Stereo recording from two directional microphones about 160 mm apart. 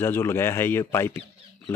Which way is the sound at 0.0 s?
15° left (ahead or behind).